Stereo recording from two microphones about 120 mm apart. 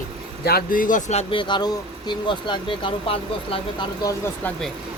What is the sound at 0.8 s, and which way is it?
Speech, 90° left.